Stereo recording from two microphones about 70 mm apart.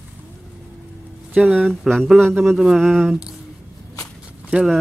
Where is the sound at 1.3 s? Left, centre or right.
Centre.